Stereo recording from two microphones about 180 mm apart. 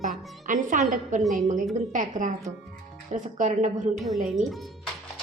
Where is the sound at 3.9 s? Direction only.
Centre (ahead or behind).